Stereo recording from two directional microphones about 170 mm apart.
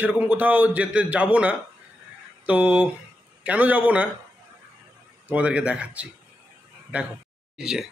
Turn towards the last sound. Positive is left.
turn(degrees=-5)  # may be behind; listen again after turning